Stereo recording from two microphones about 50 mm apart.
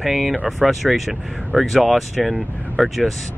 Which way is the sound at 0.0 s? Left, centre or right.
Centre.